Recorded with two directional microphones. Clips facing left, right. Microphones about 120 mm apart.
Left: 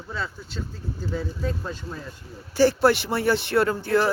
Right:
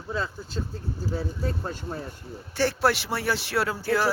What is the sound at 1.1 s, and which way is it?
Speech, 40° right (ahead or behind).